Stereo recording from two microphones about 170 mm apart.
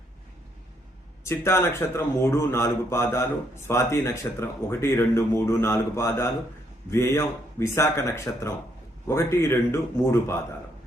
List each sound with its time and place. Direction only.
1.2 s a man's voice: 15° left (ahead or behind)